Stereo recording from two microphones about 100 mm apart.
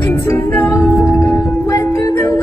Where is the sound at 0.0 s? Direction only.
25° left (ahead or behind).